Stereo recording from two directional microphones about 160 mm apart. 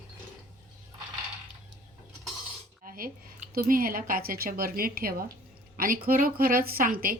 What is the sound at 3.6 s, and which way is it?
A woman's voice, 60° right (ahead or behind).